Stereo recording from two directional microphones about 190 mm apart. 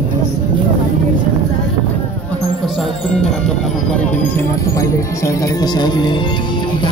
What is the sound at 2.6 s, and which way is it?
Speech, centre (ahead or behind).